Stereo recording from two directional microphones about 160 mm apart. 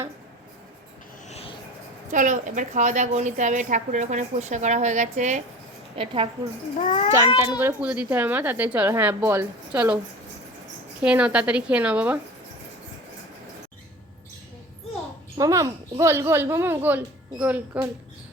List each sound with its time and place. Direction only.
1.3 s a sound: 40° left (ahead or behind)
2.0 s a woman's voice: 50° right (ahead or behind)
6.0 s a woman's voice: 35° right (ahead or behind)
6.7 s a child's voice: 45° left (ahead or behind)
7.4 s a woman's voice: 15° right (ahead or behind)
11.0 s a woman's voice: 5° right (ahead or behind)
15.4 s a woman's voice: 20° right (ahead or behind)